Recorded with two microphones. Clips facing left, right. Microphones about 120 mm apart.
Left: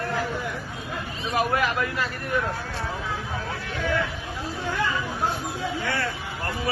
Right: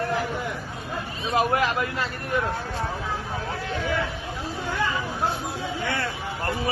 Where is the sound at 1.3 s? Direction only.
25° right (ahead or behind).